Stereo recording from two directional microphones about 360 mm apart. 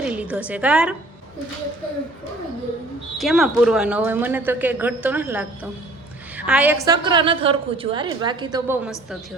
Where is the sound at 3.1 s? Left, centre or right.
Centre.